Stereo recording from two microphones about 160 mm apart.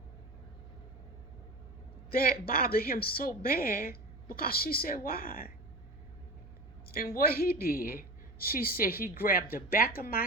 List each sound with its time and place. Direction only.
2.0 s a woman's voice: 70° left (ahead or behind)
6.9 s a woman's voice: 70° left (ahead or behind)